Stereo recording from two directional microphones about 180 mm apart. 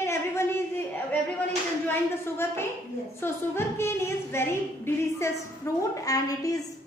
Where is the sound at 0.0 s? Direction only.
15° left (ahead or behind).